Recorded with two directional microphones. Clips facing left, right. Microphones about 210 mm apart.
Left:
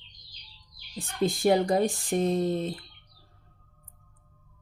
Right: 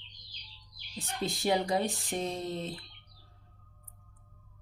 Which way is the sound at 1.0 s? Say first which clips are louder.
Left 8 dB; 50° left (ahead or behind).